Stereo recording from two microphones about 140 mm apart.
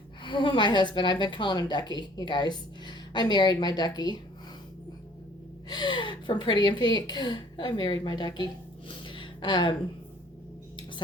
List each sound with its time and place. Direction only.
0.2 s a woman's voice: 35° left (ahead or behind)
5.6 s a woman's voice: 30° left (ahead or behind)
8.9 s a sound: 35° left (ahead or behind)